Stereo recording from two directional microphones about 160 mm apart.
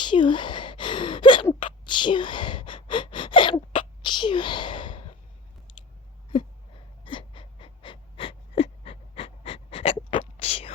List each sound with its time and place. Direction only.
0.0 s gasp: 30° left (ahead or behind)
1.9 s sneeze: 30° left (ahead or behind)
7.0 s gasp: 30° left (ahead or behind)